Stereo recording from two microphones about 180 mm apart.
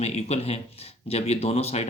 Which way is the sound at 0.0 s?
35° left (ahead or behind).